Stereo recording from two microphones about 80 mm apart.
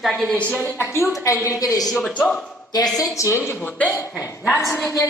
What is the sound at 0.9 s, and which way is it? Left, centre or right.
Speech, left.